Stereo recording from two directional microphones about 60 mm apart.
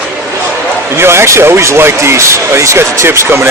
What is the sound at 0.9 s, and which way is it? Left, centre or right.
Speech, right.